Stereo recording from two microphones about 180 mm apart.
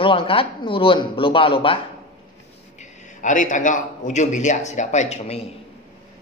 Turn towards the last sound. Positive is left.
turn(degrees=35)  # may be behind; listen again after turning